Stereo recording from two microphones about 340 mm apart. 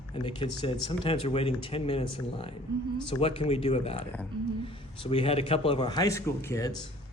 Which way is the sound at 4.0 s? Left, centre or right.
Centre.